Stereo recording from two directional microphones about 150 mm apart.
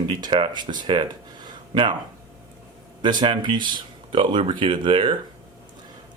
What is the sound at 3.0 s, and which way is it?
Speech, 30° right (ahead or behind).